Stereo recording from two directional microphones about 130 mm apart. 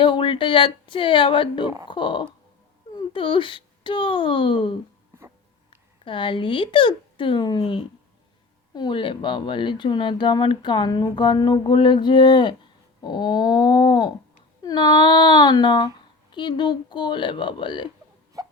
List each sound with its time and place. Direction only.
0.0 s speech: 40° left (ahead or behind)
6.1 s speech: 40° left (ahead or behind)
18.4 s hiccup: 25° right (ahead or behind)